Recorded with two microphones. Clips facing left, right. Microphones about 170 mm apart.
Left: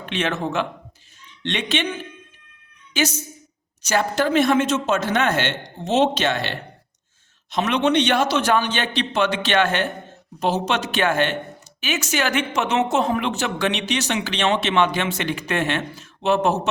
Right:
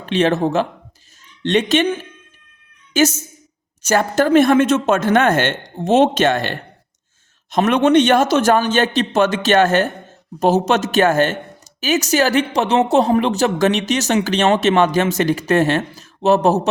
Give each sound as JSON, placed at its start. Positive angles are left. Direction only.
{"t": 0.0, "sound": "speech", "side_deg": -35}